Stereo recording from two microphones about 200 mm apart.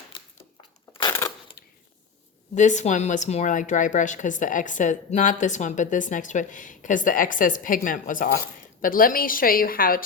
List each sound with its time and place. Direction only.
1.2 s crushing: 15° left (ahead or behind)
2.6 s a woman's voice: 35° left (ahead or behind)